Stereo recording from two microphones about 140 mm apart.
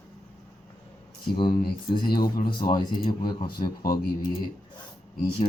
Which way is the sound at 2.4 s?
35° left (ahead or behind).